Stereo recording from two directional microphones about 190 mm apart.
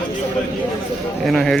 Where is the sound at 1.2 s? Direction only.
Centre (ahead or behind).